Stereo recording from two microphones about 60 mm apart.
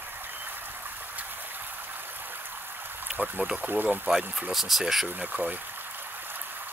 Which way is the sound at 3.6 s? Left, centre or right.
Right.